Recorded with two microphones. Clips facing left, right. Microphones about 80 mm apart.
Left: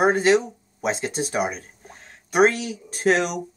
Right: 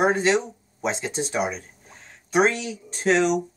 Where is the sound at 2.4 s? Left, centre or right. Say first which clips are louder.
Left 3 dB; left.